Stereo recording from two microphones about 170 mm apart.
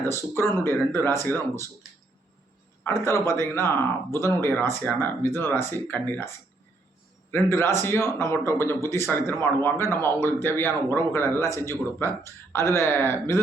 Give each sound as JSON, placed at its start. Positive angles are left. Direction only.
{"t": 0.0, "sound": "a man's voice", "side_deg": 15}
{"t": 2.8, "sound": "a man's voice", "side_deg": 15}